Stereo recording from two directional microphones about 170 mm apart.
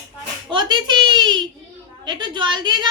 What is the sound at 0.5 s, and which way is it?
A child's voice, 25° right (ahead or behind).